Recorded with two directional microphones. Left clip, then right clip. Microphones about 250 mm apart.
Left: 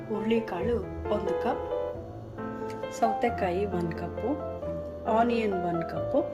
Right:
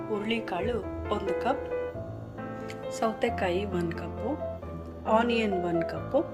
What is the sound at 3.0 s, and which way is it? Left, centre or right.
Speech, centre.